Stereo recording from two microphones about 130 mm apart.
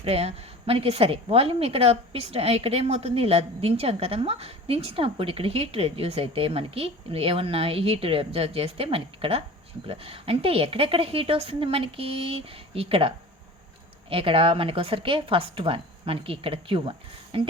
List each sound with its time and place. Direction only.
0.0 s a woman's voice: 50° right (ahead or behind)